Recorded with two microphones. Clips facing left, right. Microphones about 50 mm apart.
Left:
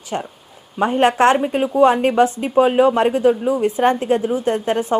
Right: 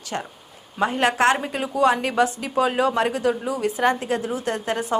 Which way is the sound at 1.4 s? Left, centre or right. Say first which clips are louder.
Left 7 dB; centre.